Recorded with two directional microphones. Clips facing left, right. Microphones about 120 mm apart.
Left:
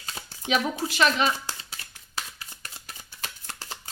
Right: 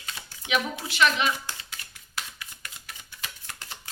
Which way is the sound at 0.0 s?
40° left (ahead or behind).